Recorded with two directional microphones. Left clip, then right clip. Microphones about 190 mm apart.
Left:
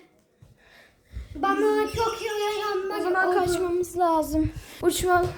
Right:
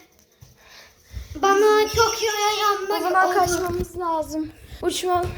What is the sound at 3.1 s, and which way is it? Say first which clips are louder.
Speech: right 4 dB; 10° left (ahead or behind).